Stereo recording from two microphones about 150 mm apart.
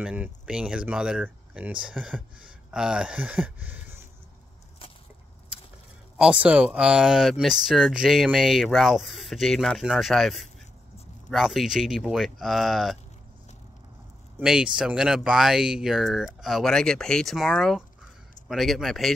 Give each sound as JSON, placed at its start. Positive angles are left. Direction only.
{"t": 0.0, "sound": "speech", "side_deg": -5}
{"t": 6.1, "sound": "speech", "side_deg": -5}
{"t": 14.4, "sound": "speech", "side_deg": -5}